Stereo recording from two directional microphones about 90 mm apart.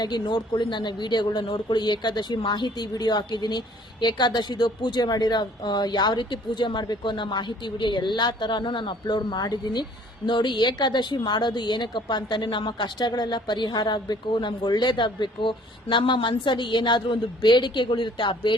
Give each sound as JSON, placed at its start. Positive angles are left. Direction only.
{"t": 0.0, "sound": "a woman's voice", "side_deg": 55}